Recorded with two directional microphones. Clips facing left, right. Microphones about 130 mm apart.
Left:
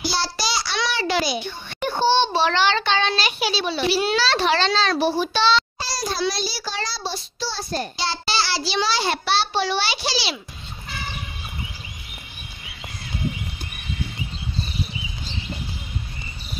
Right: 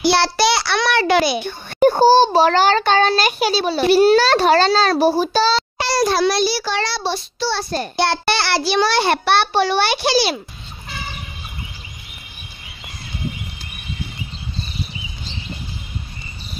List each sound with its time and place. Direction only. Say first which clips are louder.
0.0 s child singing: right 10 dB; 65° right (ahead or behind)
1.8 s a child's voice: right 8 dB; 45° right (ahead or behind)
5.8 s a child's voice: right 9 dB; 65° right (ahead or behind); by 10.4 s 50° right (ahead or behind)